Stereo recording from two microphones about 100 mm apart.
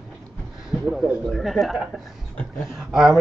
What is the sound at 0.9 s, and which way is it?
Speech, centre (ahead or behind).